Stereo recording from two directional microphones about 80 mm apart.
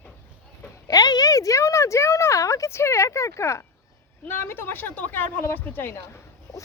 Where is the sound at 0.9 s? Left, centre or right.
Left.